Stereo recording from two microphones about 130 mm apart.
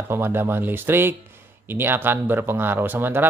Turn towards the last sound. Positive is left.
turn(degrees=-15)  # may be behind; listen again after turning